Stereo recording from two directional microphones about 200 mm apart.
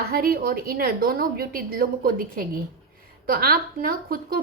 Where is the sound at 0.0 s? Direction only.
50° right (ahead or behind).